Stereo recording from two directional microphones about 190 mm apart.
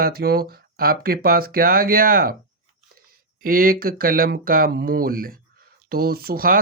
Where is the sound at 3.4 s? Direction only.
50° right (ahead or behind).